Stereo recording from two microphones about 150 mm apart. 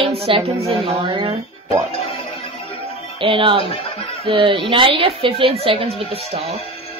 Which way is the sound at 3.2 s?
35° right (ahead or behind).